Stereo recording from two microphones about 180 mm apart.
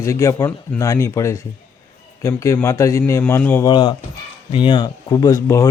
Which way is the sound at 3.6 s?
25° left (ahead or behind).